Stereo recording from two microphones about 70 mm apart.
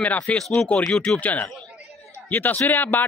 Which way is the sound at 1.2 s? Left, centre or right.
Left.